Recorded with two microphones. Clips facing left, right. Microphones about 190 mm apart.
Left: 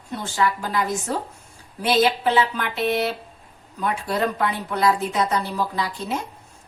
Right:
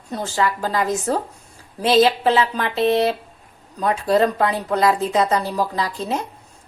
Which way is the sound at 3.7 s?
40° right (ahead or behind).